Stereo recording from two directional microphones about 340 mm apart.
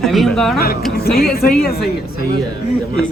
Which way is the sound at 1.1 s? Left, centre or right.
Left.